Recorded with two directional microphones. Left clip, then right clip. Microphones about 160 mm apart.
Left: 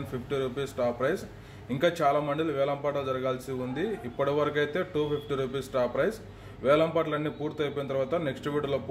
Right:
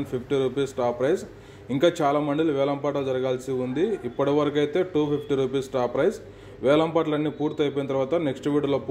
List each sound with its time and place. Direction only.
0.3 s a man's voice: 25° right (ahead or behind)